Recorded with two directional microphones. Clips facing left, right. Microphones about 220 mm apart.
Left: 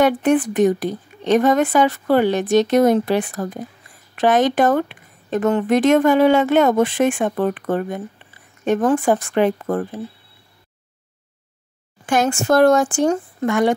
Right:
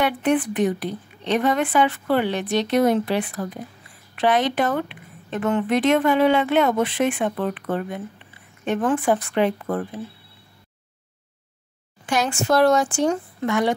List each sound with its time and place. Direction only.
0.0 s a woman's voice: 45° left (ahead or behind)
12.1 s a woman's voice: 50° left (ahead or behind)